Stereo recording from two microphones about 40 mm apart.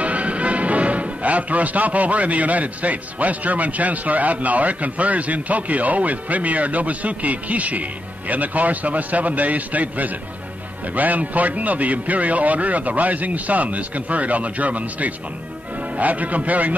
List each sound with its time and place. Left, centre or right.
0.0 s speech: right